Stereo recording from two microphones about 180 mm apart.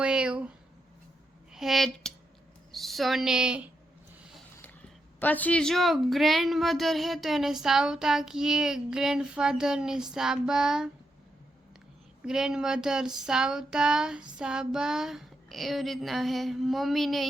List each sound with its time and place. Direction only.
0.0 s a sound: 5° right (ahead or behind)
1.5 s a woman's voice: centre (ahead or behind)
5.2 s a woman's voice: 10° left (ahead or behind)
12.2 s a woman's voice: 5° right (ahead or behind)